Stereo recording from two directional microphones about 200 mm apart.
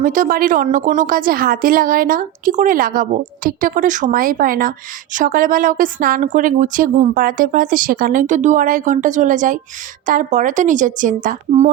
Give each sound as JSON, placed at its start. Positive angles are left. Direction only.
{"t": 0.0, "sound": "a woman's voice", "side_deg": -40}